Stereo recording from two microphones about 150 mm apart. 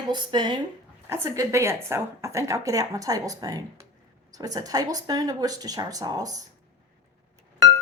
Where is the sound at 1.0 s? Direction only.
15° right (ahead or behind).